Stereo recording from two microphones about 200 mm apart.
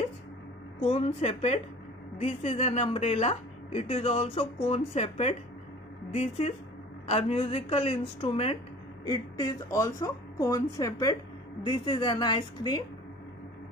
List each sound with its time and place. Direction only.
0.7 s speech: 30° left (ahead or behind)
7.1 s speech: 30° left (ahead or behind)
9.0 s a woman's voice: 20° left (ahead or behind)